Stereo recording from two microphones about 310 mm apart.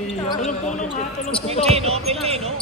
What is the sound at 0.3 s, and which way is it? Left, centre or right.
Speech, left.